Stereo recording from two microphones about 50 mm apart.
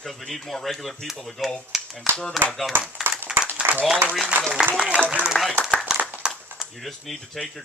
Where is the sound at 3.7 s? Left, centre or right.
Right.